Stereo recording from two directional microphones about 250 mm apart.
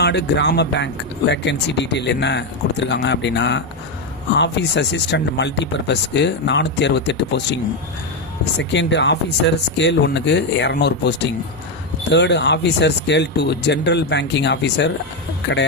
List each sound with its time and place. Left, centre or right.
0.0 s speech: left